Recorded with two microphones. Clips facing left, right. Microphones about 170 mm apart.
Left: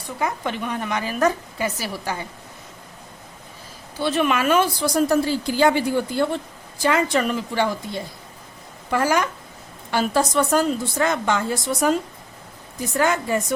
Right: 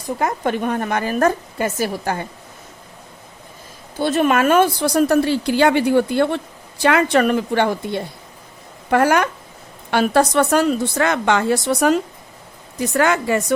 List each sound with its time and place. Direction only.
0.0 s a woman's voice: 50° right (ahead or behind)
4.0 s a woman's voice: 45° right (ahead or behind); by 13.4 s 75° right (ahead or behind)